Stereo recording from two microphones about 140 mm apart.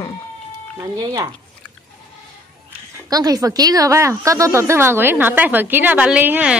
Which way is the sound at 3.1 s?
25° right (ahead or behind).